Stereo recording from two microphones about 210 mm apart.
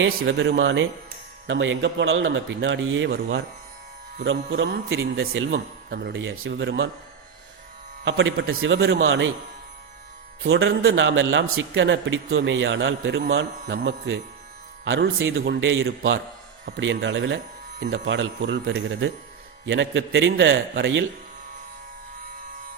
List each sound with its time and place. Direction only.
0.3 s a man's voice: 60° right (ahead or behind)
8.0 s a man's voice: 60° right (ahead or behind)
10.4 s a man's voice: 70° right (ahead or behind)
15.4 s a man's voice: 60° right (ahead or behind)